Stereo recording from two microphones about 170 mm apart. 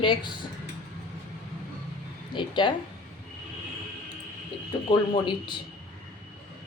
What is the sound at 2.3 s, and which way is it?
Speech, 30° left (ahead or behind).